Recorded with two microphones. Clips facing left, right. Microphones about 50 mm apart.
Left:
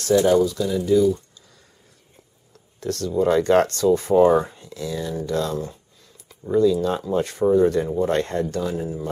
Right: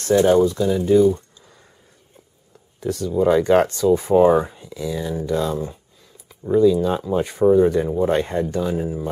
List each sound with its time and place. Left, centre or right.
0.0 s speech: right
2.5 s speech: centre